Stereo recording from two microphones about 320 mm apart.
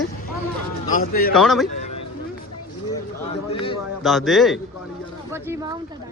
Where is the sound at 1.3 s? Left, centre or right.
Centre.